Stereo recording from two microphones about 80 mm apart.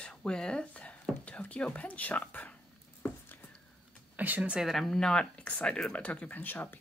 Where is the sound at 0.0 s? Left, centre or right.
Centre.